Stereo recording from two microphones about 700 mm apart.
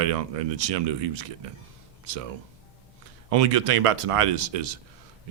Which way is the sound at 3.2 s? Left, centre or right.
Right.